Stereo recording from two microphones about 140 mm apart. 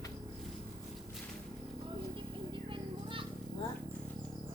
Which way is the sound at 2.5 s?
40° right (ahead or behind).